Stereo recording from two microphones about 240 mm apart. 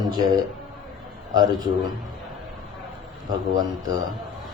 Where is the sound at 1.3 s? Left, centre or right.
Centre.